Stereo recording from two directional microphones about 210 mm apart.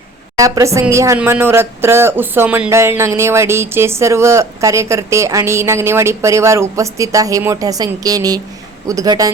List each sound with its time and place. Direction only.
0.3 s speech: 15° right (ahead or behind)